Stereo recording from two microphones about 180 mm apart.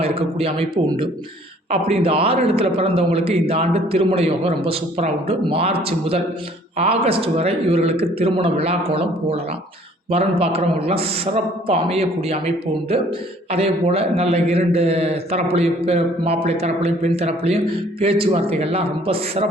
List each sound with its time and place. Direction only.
0.0 s a man's voice: 30° right (ahead or behind)